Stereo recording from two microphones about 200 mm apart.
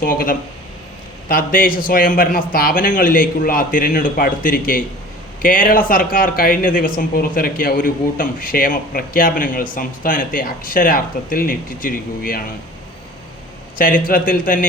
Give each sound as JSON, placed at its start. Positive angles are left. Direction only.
{"t": 0.0, "sound": "speech", "side_deg": 45}
{"t": 13.7, "sound": "speech", "side_deg": 45}